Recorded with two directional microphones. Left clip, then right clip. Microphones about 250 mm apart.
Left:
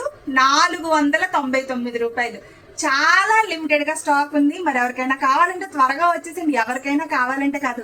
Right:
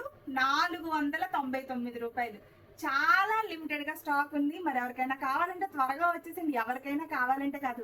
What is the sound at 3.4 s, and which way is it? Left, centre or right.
A woman's voice, centre.